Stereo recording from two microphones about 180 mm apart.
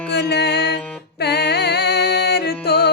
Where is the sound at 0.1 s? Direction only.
65° left (ahead or behind).